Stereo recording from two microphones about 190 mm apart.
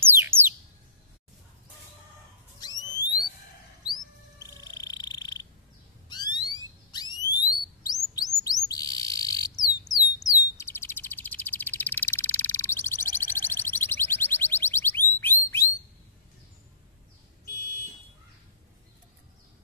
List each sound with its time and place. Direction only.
0.0 s bird: 10° right (ahead or behind)
2.6 s a sound: 20° left (ahead or behind)
4.4 s cat: 20° left (ahead or behind)
6.0 s a sound: 20° left (ahead or behind)
6.9 s alarm: 20° left (ahead or behind)
8.2 s bird: 20° left (ahead or behind)